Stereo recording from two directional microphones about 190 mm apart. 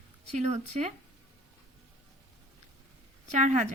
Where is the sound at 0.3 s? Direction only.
35° right (ahead or behind).